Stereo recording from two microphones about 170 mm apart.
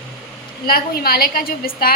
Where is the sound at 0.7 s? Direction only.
65° left (ahead or behind).